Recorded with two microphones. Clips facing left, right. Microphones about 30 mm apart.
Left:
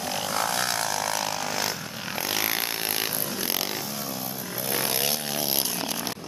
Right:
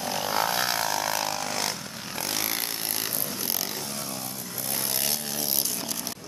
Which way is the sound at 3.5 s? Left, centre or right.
Centre.